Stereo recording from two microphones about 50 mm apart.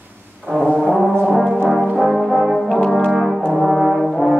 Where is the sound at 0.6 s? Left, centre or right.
Centre.